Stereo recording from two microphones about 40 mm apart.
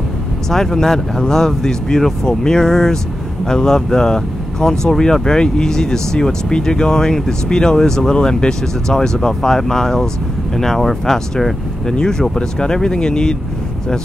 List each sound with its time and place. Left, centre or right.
0.5 s speech: centre
11.9 s speech: centre